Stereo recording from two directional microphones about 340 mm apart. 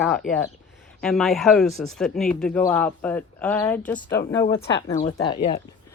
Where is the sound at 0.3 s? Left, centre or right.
Left.